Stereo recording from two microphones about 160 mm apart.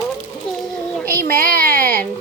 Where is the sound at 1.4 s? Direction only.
65° right (ahead or behind).